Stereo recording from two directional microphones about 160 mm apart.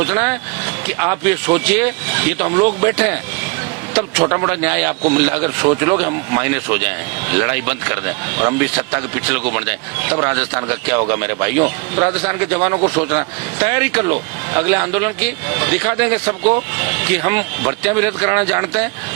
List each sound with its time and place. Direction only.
0.0 s speech: 10° right (ahead or behind)
5.6 s speech: 25° right (ahead or behind)
6.0 s speech: 15° right (ahead or behind)